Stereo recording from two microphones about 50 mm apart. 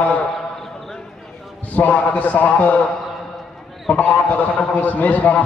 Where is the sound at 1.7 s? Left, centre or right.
Left.